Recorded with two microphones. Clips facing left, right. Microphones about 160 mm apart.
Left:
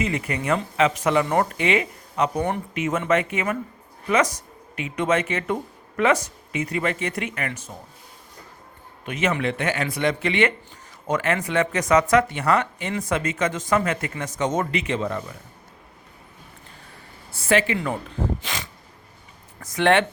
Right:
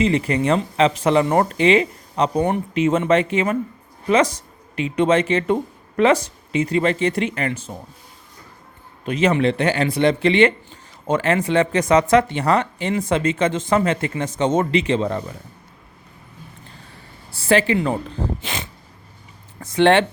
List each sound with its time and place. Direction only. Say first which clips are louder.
0.0 s speech: right 7 dB; 30° right (ahead or behind)
9.0 s speech: right 6 dB; 30° right (ahead or behind)
17.3 s speech: right 4 dB; 30° right (ahead or behind)